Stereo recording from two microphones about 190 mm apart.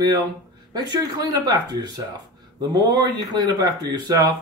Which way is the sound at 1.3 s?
20° right (ahead or behind).